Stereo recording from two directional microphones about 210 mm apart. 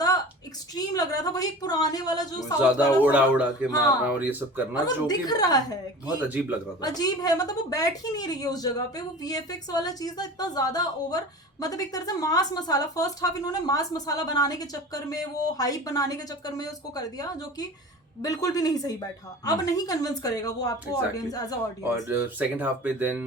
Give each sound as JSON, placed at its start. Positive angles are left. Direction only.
{"t": 0.8, "sound": "a woman's voice", "side_deg": 15}
{"t": 2.6, "sound": "speech", "side_deg": -5}
{"t": 4.7, "sound": "a woman's voice", "side_deg": 20}
{"t": 6.8, "sound": "a woman's voice", "side_deg": 20}
{"t": 21.9, "sound": "speech", "side_deg": -10}